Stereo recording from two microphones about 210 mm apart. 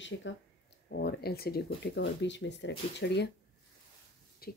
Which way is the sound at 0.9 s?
50° left (ahead or behind).